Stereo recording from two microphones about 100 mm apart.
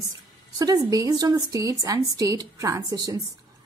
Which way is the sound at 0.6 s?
35° right (ahead or behind).